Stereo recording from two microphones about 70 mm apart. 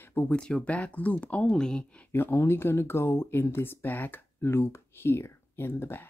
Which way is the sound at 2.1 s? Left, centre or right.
Left.